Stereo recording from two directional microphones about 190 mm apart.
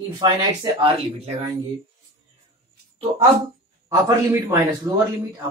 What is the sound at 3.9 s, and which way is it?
Speech, 15° right (ahead or behind).